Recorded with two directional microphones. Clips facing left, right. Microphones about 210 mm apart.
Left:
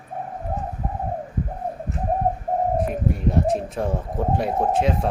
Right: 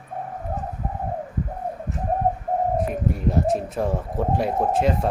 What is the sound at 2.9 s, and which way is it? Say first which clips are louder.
Speech: left 1 dB; centre (ahead or behind).